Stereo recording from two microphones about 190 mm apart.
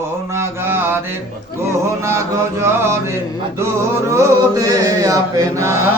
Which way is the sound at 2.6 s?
15° right (ahead or behind).